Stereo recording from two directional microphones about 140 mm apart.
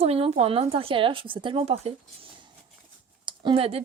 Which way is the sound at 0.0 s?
45° right (ahead or behind).